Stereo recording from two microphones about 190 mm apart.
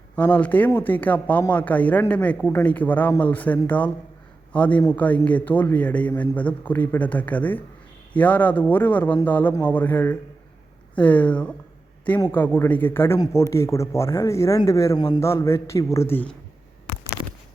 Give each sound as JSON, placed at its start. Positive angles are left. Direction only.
{"t": 0.2, "sound": "speech", "side_deg": 10}